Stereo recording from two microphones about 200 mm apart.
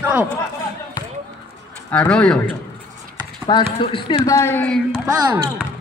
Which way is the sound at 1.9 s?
5° left (ahead or behind).